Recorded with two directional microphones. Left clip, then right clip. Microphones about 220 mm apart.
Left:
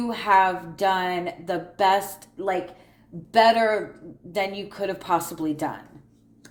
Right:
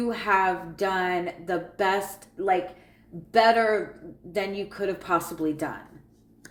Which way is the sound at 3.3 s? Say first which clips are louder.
Left 2 dB; 35° left (ahead or behind).